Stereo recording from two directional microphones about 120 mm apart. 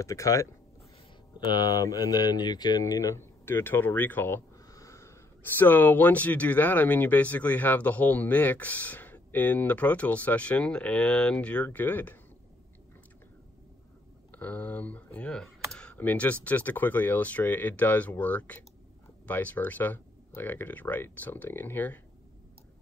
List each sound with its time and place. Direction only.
0.0 s speech: 25° left (ahead or behind)
1.7 s speech: 30° left (ahead or behind)
4.6 s a sound: 30° left (ahead or behind)
5.6 s speech: 15° left (ahead or behind)
14.3 s speech: 15° left (ahead or behind)